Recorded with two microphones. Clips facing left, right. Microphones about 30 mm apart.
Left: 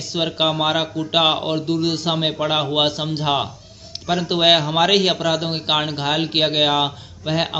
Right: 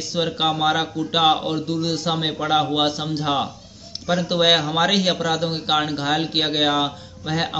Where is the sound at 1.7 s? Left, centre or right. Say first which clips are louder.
Left 5 dB; left.